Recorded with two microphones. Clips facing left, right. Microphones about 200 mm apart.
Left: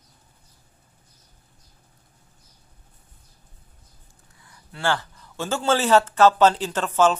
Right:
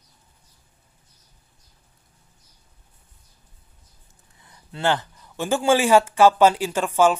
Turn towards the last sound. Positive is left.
turn(degrees=-10)  # may be behind; listen again after turning